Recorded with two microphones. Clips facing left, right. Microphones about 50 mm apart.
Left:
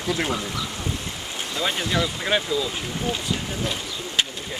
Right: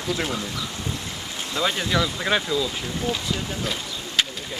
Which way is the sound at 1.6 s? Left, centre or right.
Centre.